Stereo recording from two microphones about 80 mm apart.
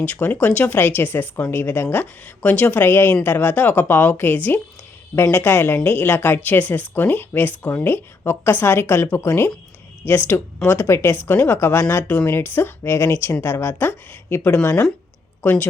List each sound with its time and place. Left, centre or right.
0.0 s speech: centre
2.8 s speech: left